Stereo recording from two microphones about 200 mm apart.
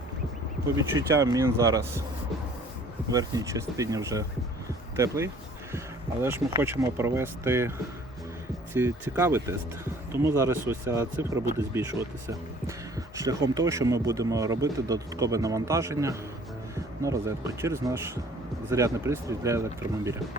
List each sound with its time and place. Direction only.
0.8 s a man's voice: 15° right (ahead or behind)
3.1 s a man's voice: 15° right (ahead or behind)
8.7 s a man's voice: 10° right (ahead or behind)